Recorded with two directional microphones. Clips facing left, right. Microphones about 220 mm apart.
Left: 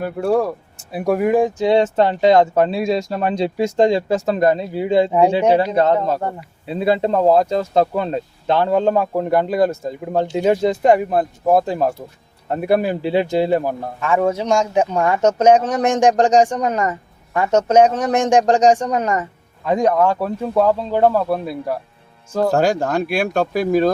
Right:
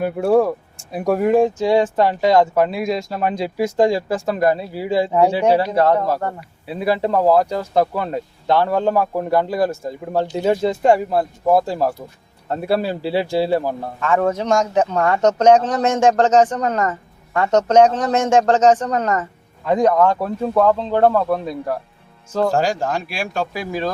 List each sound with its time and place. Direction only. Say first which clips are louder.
0.0 s speech: right 2 dB; centre (ahead or behind)
0.9 s a man's voice: even; 10° left (ahead or behind)
22.5 s speech: left 3 dB; 55° left (ahead or behind)